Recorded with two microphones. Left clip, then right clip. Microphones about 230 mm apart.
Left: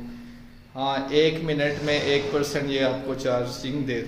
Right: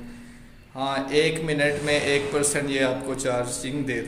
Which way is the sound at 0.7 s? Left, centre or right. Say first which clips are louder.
Even; centre.